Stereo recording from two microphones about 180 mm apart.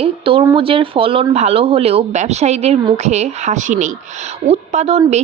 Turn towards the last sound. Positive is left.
turn(degrees=-35)  # may be behind; listen again after turning